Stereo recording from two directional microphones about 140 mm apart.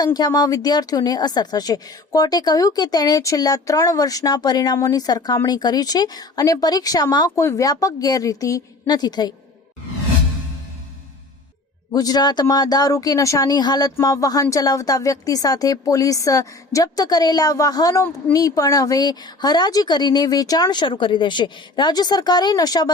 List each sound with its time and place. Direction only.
0.0 s speech: 30° left (ahead or behind)
11.9 s speech: 30° left (ahead or behind)